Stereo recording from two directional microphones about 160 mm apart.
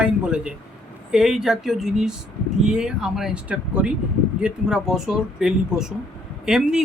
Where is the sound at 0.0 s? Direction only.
5° right (ahead or behind).